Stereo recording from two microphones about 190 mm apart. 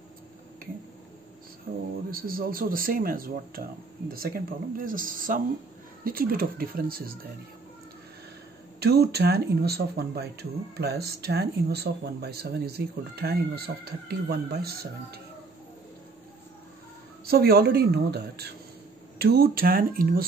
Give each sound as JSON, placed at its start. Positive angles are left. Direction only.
{"t": 1.7, "sound": "speech", "side_deg": -50}
{"t": 8.7, "sound": "speech", "side_deg": -55}
{"t": 17.3, "sound": "speech", "side_deg": -55}